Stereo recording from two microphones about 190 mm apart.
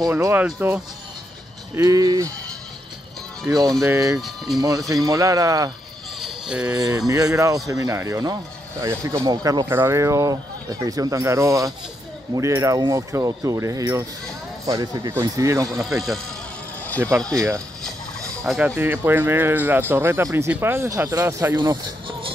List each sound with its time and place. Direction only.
0.0 s speech: 15° right (ahead or behind)
1.8 s speech: 20° right (ahead or behind)
3.4 s speech: 20° right (ahead or behind)
6.2 s a sound: 5° right (ahead or behind)
6.7 s speech: 20° right (ahead or behind)
15.8 s speech: centre (ahead or behind)
17.1 s speech: 15° right (ahead or behind)
18.4 s speech: centre (ahead or behind)
18.8 s speech: 10° right (ahead or behind)